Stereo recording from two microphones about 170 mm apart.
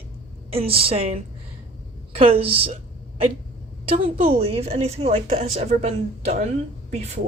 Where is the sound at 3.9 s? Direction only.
55° right (ahead or behind).